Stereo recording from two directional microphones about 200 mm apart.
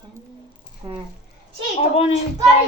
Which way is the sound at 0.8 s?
15° right (ahead or behind).